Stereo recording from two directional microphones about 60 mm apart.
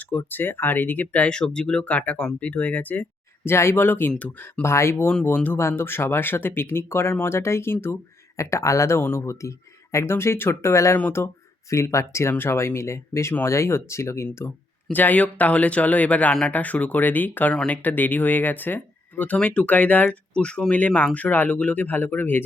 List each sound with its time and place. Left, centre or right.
0.3 s speech: left
1.3 s speech: centre; by 3.5 s left
3.5 s speech: left
4.6 s speech: left
5.3 s speech: left
5.5 s speech: left
8.4 s speech: left
9.0 s speech: left
9.2 s speech: left
9.9 s speech: left
11.2 s speech: left
11.7 s speech: left
14.9 s speech: left
20.3 s speech: centre; by 22.4 s left